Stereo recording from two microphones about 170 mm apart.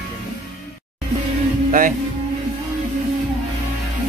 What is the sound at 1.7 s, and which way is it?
Speech, 50° right (ahead or behind).